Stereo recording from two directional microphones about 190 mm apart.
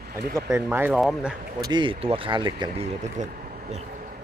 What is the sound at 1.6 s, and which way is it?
Speech, 25° right (ahead or behind).